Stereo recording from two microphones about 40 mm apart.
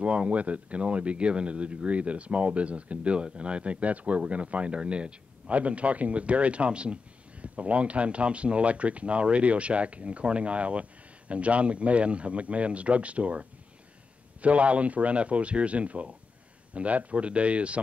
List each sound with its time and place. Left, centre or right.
0.0 s speech: right